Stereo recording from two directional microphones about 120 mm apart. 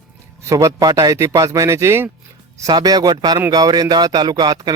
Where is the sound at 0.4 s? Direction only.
30° right (ahead or behind).